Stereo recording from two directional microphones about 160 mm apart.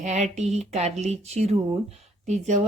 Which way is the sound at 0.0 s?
45° right (ahead or behind).